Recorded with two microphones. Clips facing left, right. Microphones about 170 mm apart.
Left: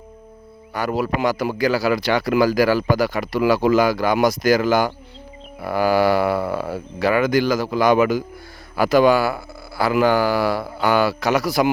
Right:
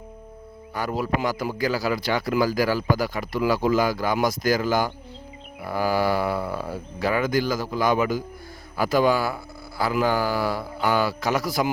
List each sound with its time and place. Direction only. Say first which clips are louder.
0.7 s a man's voice: left 4 dB; 75° left (ahead or behind)